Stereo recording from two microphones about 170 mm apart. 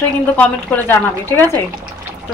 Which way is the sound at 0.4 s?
10° left (ahead or behind).